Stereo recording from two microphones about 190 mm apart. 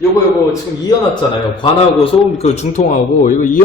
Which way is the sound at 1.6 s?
30° left (ahead or behind).